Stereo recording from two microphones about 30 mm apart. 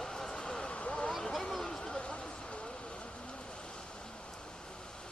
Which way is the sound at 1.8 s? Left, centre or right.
Left.